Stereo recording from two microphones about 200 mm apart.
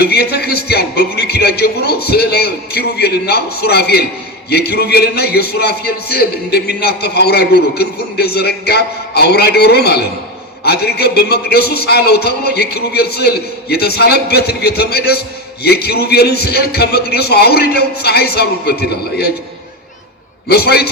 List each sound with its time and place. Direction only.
0.0 s a man's voice: 50° left (ahead or behind)
20.5 s a man's voice: 50° left (ahead or behind)